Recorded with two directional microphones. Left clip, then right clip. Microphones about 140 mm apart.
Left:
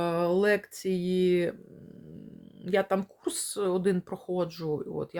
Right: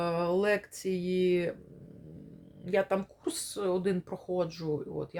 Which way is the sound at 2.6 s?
45° left (ahead or behind).